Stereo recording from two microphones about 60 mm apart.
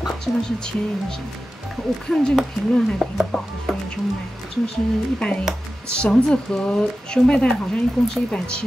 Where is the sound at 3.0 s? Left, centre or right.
Centre.